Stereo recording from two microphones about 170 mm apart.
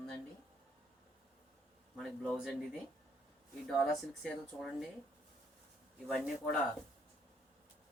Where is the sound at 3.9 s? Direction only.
Centre (ahead or behind).